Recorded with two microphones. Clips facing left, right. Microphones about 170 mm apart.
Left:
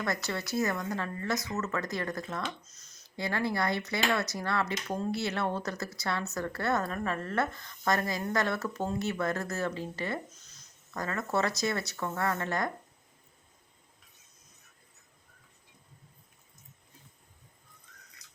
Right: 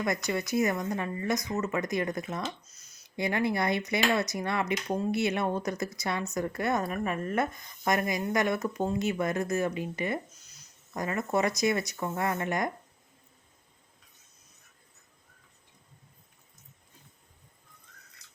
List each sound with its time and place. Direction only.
0.3 s speech: 15° right (ahead or behind)